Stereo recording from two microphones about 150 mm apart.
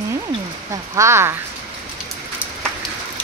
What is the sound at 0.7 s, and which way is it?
Speech, 20° right (ahead or behind).